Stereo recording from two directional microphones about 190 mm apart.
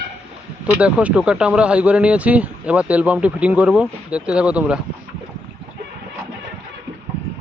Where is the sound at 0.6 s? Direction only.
5° right (ahead or behind).